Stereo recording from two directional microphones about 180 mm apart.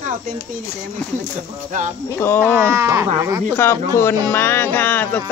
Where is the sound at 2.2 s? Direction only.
10° left (ahead or behind).